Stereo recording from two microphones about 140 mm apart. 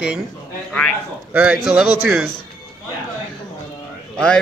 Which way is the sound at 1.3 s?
5° right (ahead or behind).